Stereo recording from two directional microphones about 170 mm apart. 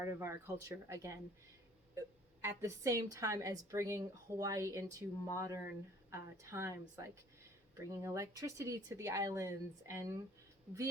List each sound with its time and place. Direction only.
0.2 s a woman's voice: 15° right (ahead or behind)